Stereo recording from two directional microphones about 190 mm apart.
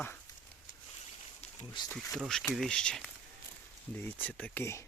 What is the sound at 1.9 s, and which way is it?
Speech, centre (ahead or behind).